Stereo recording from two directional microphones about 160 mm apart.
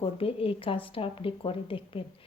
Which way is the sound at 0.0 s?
35° left (ahead or behind).